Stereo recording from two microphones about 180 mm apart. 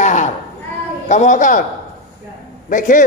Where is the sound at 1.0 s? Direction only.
40° left (ahead or behind).